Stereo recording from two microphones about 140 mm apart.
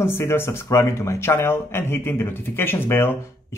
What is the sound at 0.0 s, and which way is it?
Speech, 20° left (ahead or behind).